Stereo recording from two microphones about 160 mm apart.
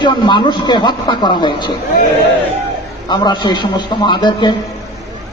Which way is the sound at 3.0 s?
25° left (ahead or behind).